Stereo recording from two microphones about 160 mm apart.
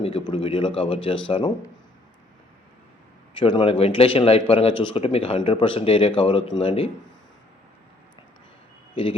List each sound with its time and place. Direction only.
0.0 s speech: 35° left (ahead or behind)
3.3 s speech: 30° left (ahead or behind)